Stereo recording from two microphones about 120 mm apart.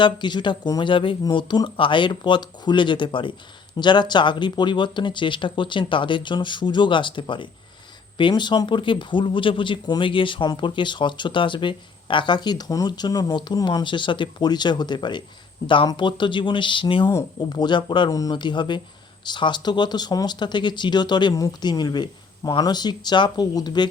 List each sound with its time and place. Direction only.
0.0 s speech: 40° left (ahead or behind)